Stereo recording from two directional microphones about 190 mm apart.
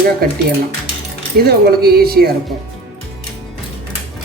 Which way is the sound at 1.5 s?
55° right (ahead or behind).